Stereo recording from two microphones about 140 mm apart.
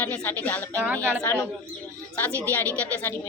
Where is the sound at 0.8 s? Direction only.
15° right (ahead or behind).